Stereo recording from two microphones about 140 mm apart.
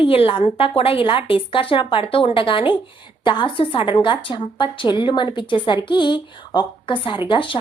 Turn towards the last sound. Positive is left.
turn(degrees=35)  # may be behind; listen again after turning